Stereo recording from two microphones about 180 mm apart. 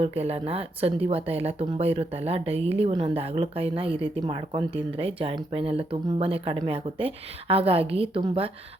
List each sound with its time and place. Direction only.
0.0 s speech: 35° right (ahead or behind)